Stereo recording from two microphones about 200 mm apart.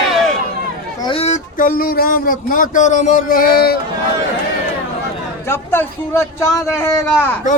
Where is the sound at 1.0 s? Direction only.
30° left (ahead or behind); by 3.8 s 50° left (ahead or behind).